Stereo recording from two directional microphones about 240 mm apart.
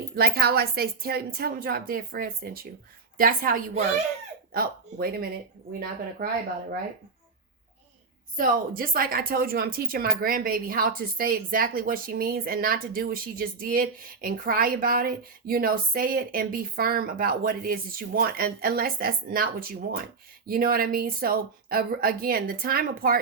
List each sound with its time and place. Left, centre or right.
0.2 s a woman's voice: right
8.4 s a woman's voice: right